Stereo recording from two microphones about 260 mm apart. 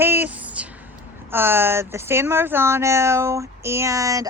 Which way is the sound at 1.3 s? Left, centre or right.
Centre.